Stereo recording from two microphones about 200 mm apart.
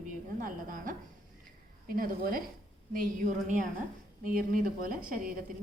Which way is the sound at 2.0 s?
45° right (ahead or behind).